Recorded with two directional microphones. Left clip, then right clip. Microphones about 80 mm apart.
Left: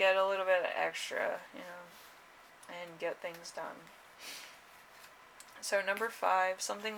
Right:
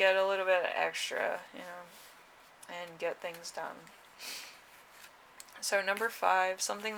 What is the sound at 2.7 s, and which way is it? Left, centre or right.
Speech, right.